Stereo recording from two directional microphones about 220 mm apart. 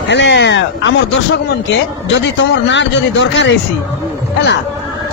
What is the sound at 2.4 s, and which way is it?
Speech, 55° left (ahead or behind).